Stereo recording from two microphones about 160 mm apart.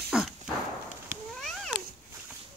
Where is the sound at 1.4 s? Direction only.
Centre (ahead or behind).